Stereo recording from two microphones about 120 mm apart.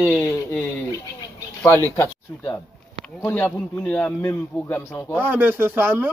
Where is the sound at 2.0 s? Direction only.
25° left (ahead or behind).